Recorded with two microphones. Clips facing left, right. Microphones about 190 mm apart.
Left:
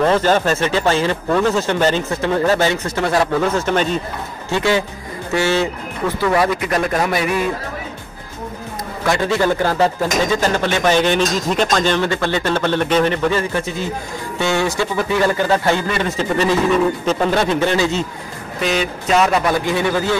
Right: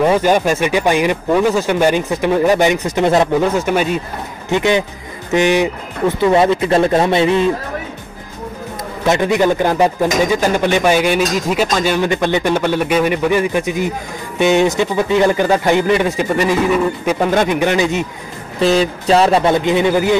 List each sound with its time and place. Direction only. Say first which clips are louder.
0.0 s speech: right 2 dB; 10° right (ahead or behind)
9.0 s speech: right 3 dB; 20° right (ahead or behind)
18.6 s speech: right 6 dB; 30° right (ahead or behind)